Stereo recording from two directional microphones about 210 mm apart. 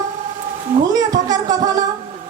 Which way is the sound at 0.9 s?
15° right (ahead or behind).